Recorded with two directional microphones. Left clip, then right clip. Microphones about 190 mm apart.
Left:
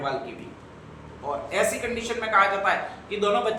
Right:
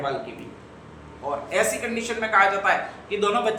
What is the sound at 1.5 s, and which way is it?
A woman's voice, 15° right (ahead or behind).